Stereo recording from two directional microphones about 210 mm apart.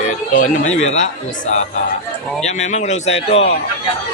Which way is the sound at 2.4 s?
35° left (ahead or behind).